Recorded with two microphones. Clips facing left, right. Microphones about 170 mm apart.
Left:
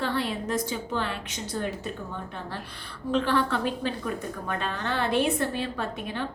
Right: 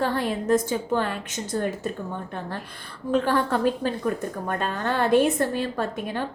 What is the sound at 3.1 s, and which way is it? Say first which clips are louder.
A woman's voice: right 3 dB; 45° right (ahead or behind).